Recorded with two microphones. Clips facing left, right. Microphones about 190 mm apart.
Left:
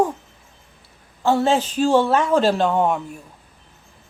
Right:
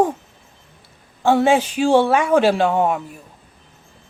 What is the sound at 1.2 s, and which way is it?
Speech, 15° right (ahead or behind).